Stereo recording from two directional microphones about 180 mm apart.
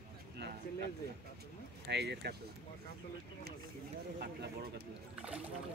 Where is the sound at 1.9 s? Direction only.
70° right (ahead or behind).